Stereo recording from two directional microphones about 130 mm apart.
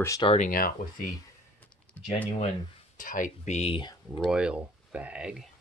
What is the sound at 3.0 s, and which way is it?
Speech, 90° left.